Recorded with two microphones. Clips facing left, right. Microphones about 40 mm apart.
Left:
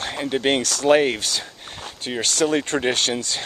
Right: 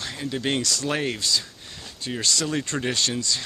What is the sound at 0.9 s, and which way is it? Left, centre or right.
Speech, left.